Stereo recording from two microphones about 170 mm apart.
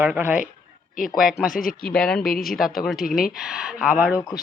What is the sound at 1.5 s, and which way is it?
Speech, 55° left (ahead or behind).